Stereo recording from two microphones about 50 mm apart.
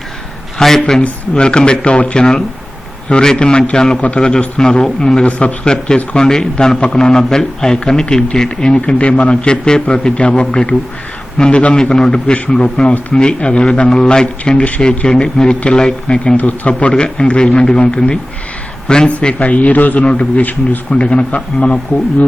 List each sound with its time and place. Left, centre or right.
0.6 s a man's voice: centre
4.0 s speech: left
4.3 s a man's voice: centre
5.2 s a man's voice: left
16.4 s speech: left
16.9 s a man's voice: centre